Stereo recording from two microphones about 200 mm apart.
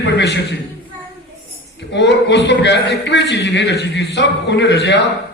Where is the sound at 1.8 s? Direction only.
60° left (ahead or behind).